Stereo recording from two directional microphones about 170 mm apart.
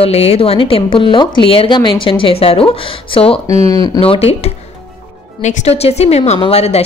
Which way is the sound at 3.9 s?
35° left (ahead or behind).